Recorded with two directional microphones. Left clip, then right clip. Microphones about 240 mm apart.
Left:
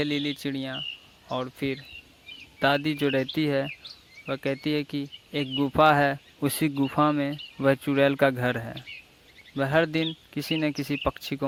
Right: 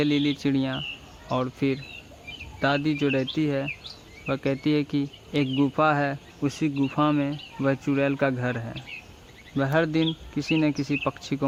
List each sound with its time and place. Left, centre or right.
0.0 s speech: left